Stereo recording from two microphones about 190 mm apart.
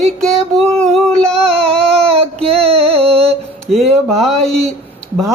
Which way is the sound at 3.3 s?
Centre (ahead or behind).